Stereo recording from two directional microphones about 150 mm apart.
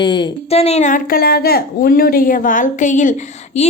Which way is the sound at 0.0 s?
30° left (ahead or behind).